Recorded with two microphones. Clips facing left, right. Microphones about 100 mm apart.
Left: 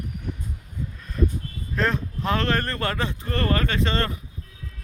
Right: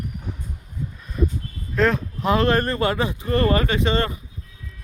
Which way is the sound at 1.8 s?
5° right (ahead or behind).